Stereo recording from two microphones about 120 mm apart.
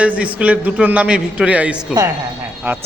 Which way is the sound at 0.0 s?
10° right (ahead or behind).